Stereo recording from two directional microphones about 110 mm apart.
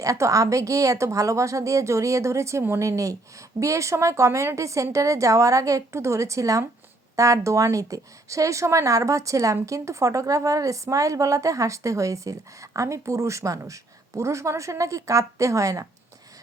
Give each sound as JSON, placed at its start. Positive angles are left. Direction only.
{"t": 0.0, "sound": "a woman's voice", "side_deg": -30}